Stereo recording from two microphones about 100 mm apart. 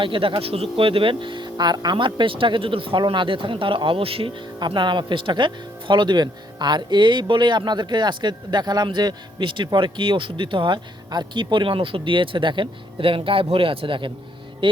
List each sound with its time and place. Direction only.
0.0 s speech: 60° right (ahead or behind)
4.6 s speech: 50° right (ahead or behind)
14.6 s music: 55° right (ahead or behind)